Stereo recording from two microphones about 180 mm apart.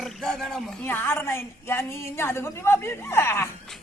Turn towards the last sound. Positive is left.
turn(degrees=15)  # may be behind; listen again after turning